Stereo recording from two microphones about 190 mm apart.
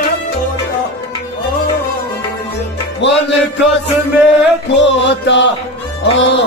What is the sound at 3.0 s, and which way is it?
Chant, 65° left (ahead or behind).